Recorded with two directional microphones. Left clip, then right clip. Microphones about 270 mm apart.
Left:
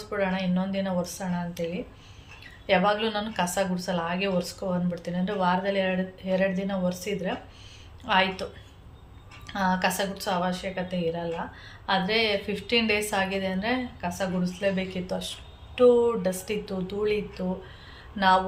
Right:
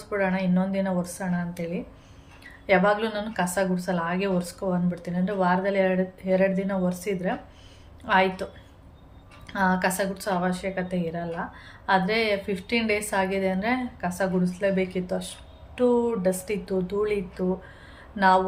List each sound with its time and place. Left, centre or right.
0.1 s speech: centre
9.5 s speech: centre